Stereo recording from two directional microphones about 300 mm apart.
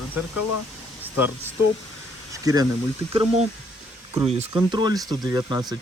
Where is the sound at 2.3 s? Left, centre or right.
Centre.